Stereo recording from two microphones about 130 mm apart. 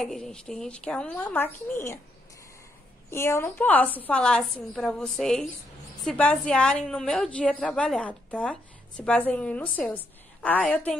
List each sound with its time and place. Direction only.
0.0 s a woman's voice: 5° left (ahead or behind)
3.1 s a woman's voice: 20° left (ahead or behind)